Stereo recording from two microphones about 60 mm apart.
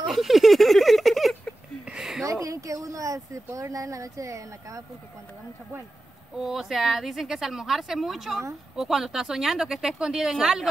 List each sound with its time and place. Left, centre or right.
0.1 s a sound: centre
2.2 s speech: right
6.3 s speech: centre